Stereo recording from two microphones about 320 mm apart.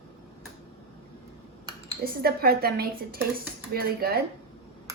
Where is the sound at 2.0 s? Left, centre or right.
Right.